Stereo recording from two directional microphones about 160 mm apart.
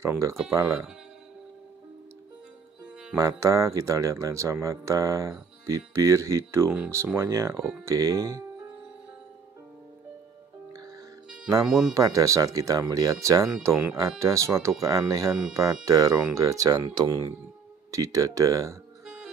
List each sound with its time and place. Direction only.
0.0 s speech: 20° right (ahead or behind)
2.8 s music: 5° right (ahead or behind)
3.2 s speech: 20° right (ahead or behind)
11.6 s speech: 5° right (ahead or behind)
11.9 s speech: 20° right (ahead or behind)